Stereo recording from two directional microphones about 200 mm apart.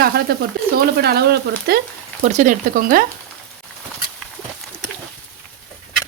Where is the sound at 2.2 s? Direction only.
35° right (ahead or behind).